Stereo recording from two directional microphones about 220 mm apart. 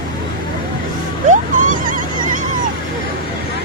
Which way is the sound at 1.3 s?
35° right (ahead or behind).